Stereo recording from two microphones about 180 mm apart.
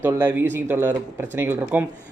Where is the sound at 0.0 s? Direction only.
10° right (ahead or behind).